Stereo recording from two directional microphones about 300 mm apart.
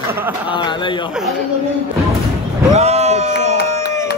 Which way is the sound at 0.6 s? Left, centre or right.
Centre.